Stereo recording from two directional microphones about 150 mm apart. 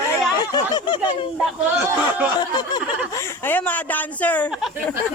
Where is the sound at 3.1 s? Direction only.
20° left (ahead or behind).